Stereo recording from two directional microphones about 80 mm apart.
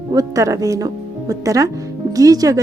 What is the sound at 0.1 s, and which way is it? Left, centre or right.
Speech, right.